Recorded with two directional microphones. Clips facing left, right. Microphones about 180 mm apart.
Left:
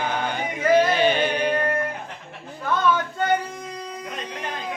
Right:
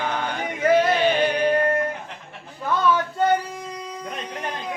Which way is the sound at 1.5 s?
30° right (ahead or behind).